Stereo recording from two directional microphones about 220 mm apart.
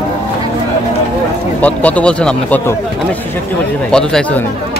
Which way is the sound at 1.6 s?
5° left (ahead or behind).